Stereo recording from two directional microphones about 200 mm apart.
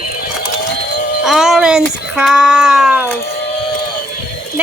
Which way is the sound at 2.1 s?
Centre (ahead or behind).